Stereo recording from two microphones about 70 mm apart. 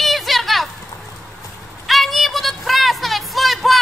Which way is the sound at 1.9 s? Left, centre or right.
Centre.